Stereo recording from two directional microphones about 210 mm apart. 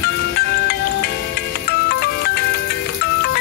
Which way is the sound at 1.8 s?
45° left (ahead or behind).